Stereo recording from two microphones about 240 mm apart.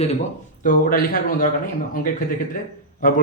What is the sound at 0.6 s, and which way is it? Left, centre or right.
A man's voice, left.